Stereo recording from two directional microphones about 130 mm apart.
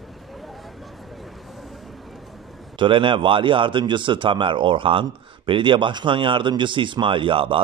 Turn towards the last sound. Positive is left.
turn(degrees=-40)  # may be behind; listen again after turning